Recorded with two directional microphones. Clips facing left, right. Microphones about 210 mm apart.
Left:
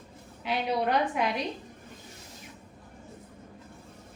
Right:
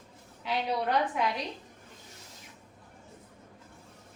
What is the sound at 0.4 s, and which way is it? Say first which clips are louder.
Speech: left 2 dB; 20° left (ahead or behind).